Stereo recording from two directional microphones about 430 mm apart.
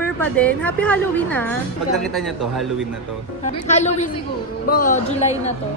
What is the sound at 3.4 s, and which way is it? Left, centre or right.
Speech, centre.